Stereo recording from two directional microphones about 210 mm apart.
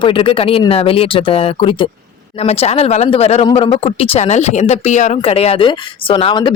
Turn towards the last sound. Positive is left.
turn(degrees=25)  # may be behind; listen again after turning